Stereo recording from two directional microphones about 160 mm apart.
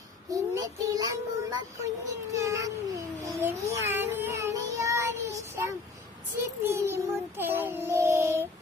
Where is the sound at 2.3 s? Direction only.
20° right (ahead or behind).